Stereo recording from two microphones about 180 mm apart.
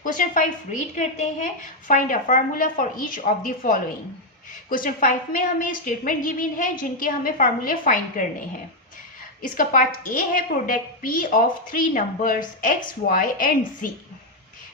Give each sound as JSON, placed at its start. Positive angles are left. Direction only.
{"t": 0.0, "sound": "a woman's voice", "side_deg": 45}
{"t": 9.4, "sound": "a woman's voice", "side_deg": 50}